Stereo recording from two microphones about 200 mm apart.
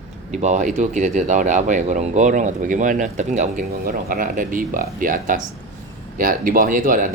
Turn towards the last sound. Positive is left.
turn(degrees=-45)  # may be behind; listen again after turning